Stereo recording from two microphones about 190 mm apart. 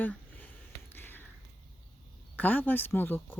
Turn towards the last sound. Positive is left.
turn(degrees=10)  # may be behind; listen again after turning